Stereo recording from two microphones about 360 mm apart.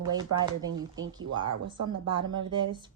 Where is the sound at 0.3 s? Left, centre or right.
Right.